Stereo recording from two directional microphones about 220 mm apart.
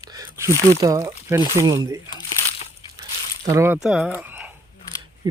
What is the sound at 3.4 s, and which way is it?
Speech, 10° right (ahead or behind).